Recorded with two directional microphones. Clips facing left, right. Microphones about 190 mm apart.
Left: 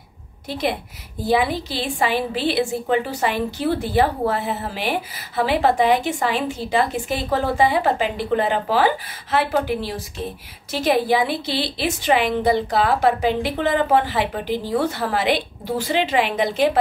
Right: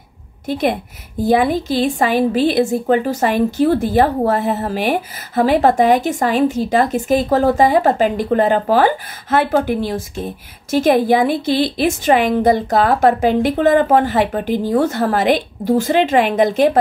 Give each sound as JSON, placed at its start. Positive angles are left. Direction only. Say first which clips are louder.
{"t": 0.5, "sound": "a woman's voice", "louder": "right 6 dB", "side_deg": -50}